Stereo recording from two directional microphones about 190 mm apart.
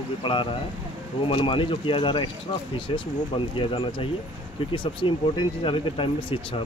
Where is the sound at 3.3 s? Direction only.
25° left (ahead or behind).